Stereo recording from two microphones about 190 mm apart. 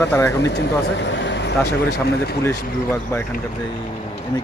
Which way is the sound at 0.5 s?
65° left (ahead or behind).